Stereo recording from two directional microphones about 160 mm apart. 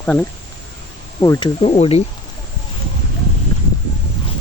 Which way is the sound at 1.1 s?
20° left (ahead or behind).